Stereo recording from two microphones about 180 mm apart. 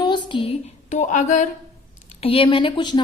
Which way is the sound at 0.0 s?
25° left (ahead or behind).